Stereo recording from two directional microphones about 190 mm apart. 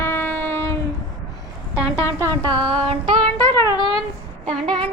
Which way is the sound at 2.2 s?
20° right (ahead or behind).